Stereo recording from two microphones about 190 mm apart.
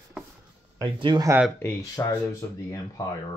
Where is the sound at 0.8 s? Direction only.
20° right (ahead or behind).